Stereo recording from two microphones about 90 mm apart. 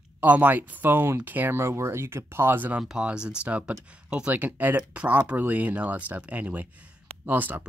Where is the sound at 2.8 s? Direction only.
10° right (ahead or behind).